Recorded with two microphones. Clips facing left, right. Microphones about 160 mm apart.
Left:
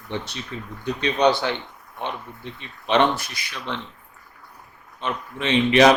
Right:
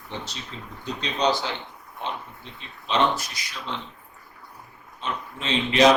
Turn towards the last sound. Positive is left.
turn(degrees=65)  # may be behind; listen again after turning